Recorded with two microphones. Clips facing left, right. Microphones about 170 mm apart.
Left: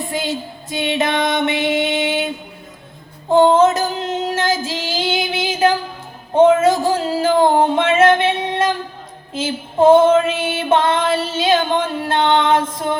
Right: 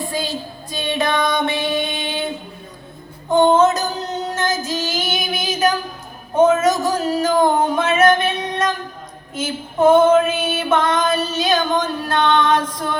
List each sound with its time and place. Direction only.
0.0 s female singing: 20° left (ahead or behind)
3.2 s a sound: 30° left (ahead or behind)
3.8 s music: 25° left (ahead or behind)
4.4 s child singing: 90° left
4.9 s music: 30° left (ahead or behind)
6.3 s child singing: 30° left (ahead or behind)
9.3 s music: 30° left (ahead or behind)